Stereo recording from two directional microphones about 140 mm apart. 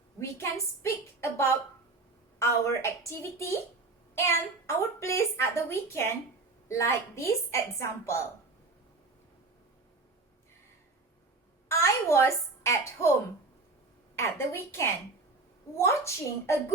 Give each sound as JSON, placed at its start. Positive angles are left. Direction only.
{"t": 0.2, "sound": "a woman's voice", "side_deg": 20}
{"t": 11.7, "sound": "a woman's voice", "side_deg": 20}
{"t": 14.2, "sound": "a woman's voice", "side_deg": 20}